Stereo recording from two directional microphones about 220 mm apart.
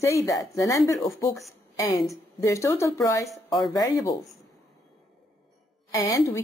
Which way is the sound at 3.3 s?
Centre (ahead or behind).